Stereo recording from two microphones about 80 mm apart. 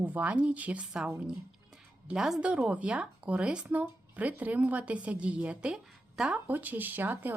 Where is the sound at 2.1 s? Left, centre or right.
Centre.